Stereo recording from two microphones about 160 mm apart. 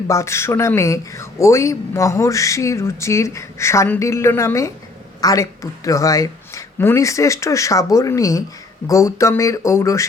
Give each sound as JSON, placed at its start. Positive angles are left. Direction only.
{"t": 0.1, "sound": "speech", "side_deg": 15}